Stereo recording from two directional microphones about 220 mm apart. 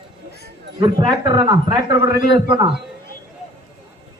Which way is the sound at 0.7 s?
20° right (ahead or behind).